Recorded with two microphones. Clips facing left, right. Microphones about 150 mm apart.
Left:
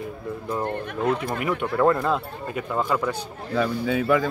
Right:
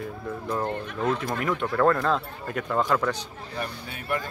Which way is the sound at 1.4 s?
10° left (ahead or behind).